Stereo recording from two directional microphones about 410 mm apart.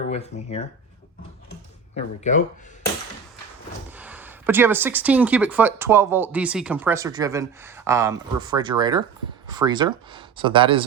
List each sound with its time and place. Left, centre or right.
0.1 s speech: centre
2.0 s speech: centre
3.9 s speech: centre